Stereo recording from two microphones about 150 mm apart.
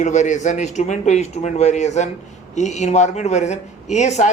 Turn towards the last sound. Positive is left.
turn(degrees=50)  # may be behind; listen again after turning